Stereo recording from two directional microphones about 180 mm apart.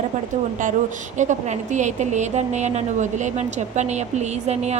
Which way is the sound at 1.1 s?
45° right (ahead or behind).